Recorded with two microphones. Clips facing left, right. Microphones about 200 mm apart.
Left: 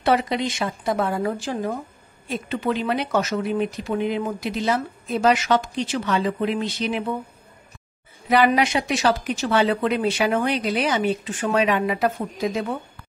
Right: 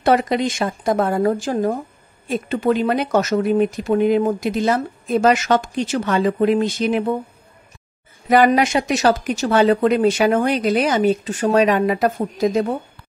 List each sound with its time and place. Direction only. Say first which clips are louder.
0.0 s speech: right 4 dB; 45° right (ahead or behind)
8.3 s speech: right 4 dB; 45° right (ahead or behind)